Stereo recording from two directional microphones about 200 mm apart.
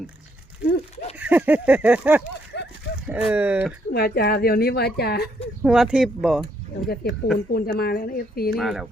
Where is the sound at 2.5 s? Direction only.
55° left (ahead or behind).